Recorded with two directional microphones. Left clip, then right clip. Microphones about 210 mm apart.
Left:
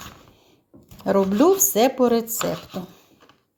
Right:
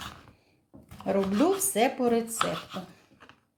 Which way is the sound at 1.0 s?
35° left (ahead or behind).